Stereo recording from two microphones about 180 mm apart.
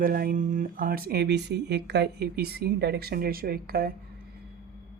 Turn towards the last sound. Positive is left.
turn(degrees=-55)  # may be behind; listen again after turning